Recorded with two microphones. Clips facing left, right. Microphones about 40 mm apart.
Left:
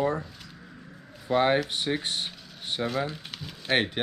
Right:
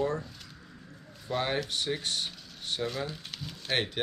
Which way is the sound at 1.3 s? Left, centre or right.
Left.